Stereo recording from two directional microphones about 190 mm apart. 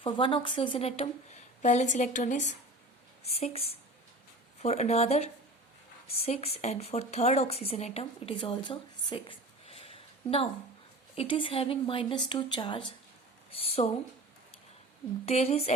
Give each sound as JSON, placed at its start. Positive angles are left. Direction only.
{"t": 0.0, "sound": "a woman's voice", "side_deg": 25}
{"t": 13.5, "sound": "a sound", "side_deg": 30}
{"t": 15.3, "sound": "a woman's voice", "side_deg": 35}